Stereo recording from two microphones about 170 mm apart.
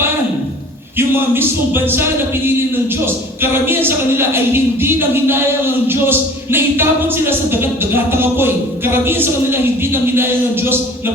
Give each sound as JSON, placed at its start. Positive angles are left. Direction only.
{"t": 0.9, "sound": "speech", "side_deg": -10}